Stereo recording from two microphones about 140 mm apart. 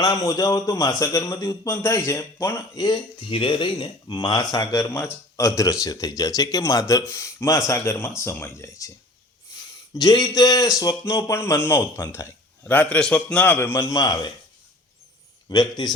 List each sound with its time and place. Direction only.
0.0 s a man's voice: 25° left (ahead or behind)
9.9 s a man's voice: 25° left (ahead or behind)
15.5 s a man's voice: 25° left (ahead or behind)